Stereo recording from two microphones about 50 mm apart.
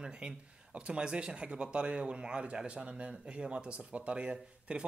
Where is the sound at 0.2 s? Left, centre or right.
Right.